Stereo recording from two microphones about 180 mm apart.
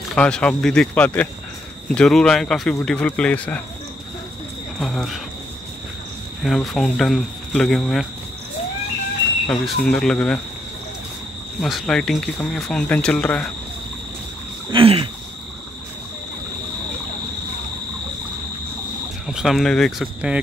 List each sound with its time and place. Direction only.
0.1 s speech: 5° left (ahead or behind)
4.7 s speech: centre (ahead or behind)
6.4 s speech: centre (ahead or behind)
9.5 s speech: 5° left (ahead or behind)
11.6 s speech: centre (ahead or behind)
14.7 s a sound: 30° right (ahead or behind)
19.2 s speech: centre (ahead or behind)